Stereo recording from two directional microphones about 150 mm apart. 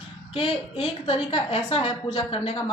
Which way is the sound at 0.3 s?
35° left (ahead or behind).